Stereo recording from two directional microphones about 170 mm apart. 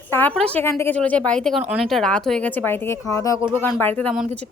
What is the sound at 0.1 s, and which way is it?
A woman's voice, 10° left (ahead or behind).